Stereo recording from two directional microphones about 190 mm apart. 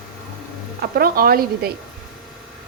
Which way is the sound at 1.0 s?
50° right (ahead or behind).